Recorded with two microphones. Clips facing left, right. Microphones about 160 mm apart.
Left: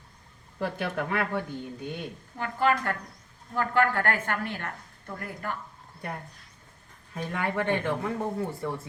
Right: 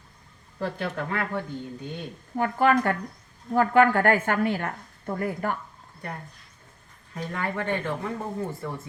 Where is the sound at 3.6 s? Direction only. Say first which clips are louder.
Right 6 dB; 15° right (ahead or behind).